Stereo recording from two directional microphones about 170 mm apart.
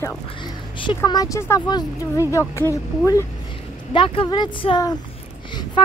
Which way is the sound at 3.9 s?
30° left (ahead or behind).